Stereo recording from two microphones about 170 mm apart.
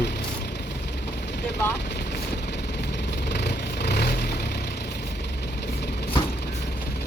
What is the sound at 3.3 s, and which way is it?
Vehicle, 80° left.